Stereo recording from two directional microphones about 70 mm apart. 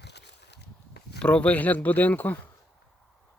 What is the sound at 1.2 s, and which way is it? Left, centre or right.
Speech, centre.